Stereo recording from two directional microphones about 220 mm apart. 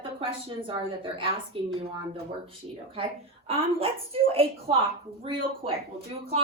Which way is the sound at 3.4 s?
25° right (ahead or behind).